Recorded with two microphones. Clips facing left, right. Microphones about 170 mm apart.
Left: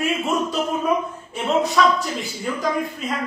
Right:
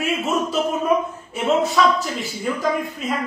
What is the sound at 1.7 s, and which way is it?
Speech, centre (ahead or behind).